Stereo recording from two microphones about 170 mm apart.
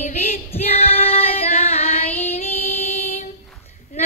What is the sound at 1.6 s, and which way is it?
Music, 35° left (ahead or behind).